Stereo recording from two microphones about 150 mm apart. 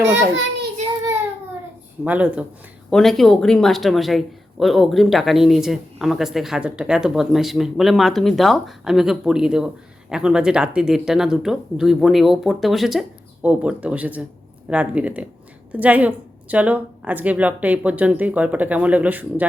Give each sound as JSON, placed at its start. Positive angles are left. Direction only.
{"t": 2.0, "sound": "a woman's voice", "side_deg": -10}
{"t": 2.9, "sound": "a woman's voice", "side_deg": 0}